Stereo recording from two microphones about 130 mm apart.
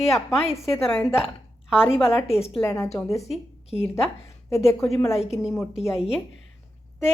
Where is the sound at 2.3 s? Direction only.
50° left (ahead or behind).